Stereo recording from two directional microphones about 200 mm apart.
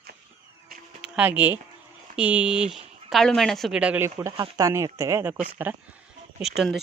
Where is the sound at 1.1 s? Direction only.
10° right (ahead or behind).